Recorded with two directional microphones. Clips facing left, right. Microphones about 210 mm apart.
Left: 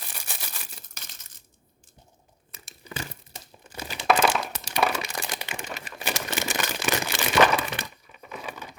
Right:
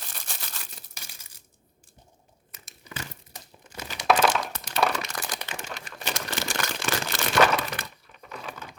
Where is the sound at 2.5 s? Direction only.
30° left (ahead or behind).